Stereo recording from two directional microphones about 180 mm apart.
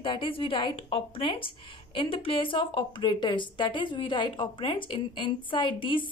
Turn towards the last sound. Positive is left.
turn(degrees=30)  # may be behind; listen again after turning